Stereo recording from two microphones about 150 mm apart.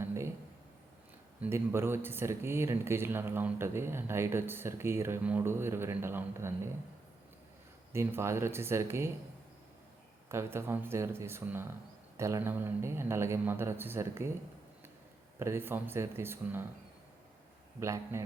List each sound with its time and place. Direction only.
0.0 s a sound: 20° right (ahead or behind)
1.4 s speech: 15° right (ahead or behind)
7.9 s speech: 15° right (ahead or behind)
10.2 s speech: 15° right (ahead or behind)
15.4 s speech: 15° right (ahead or behind)
17.7 s a man's voice: 20° right (ahead or behind)